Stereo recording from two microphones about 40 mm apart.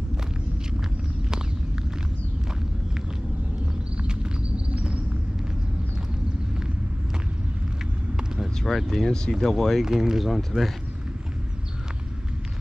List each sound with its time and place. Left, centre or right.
4.1 s a sound: right
8.6 s speech: centre
9.8 s speech: centre